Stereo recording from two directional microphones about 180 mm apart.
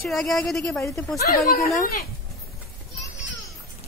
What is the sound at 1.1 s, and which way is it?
Speech, 55° left (ahead or behind).